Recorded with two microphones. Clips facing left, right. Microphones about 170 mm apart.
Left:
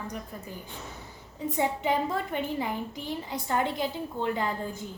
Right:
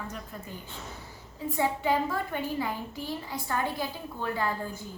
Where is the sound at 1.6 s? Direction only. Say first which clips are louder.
Even; 20° left (ahead or behind).